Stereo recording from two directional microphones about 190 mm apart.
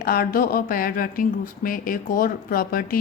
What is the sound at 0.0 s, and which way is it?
A woman's voice, 50° left (ahead or behind).